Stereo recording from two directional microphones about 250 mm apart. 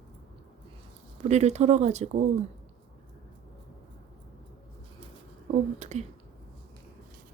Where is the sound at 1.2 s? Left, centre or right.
Right.